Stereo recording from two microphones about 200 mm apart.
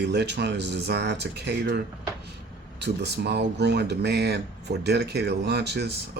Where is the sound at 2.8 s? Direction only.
55° right (ahead or behind).